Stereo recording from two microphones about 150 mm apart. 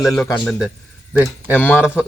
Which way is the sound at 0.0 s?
20° left (ahead or behind).